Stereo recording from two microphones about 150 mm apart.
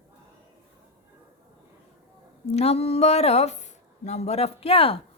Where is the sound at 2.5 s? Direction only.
45° left (ahead or behind).